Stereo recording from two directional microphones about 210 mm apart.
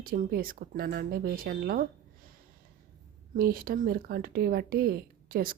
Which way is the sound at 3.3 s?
45° right (ahead or behind).